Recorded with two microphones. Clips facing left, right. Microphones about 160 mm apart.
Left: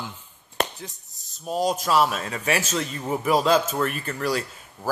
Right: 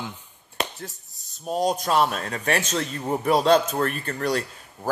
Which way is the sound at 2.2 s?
50° right (ahead or behind).